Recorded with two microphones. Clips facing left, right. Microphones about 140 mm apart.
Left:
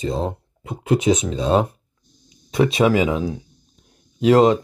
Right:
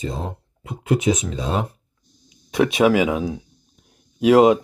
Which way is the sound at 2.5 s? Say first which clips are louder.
Even; 5° right (ahead or behind).